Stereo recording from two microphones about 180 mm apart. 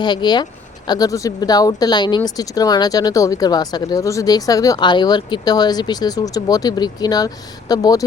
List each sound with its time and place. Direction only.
0.0 s speech: 25° left (ahead or behind)